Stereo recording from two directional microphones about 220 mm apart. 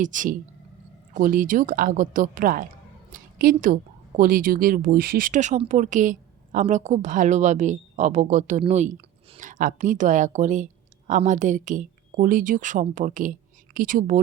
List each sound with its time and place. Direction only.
0.0 s speech: 35° right (ahead or behind)
3.1 s cat: 40° right (ahead or behind)
4.2 s speech: 40° right (ahead or behind)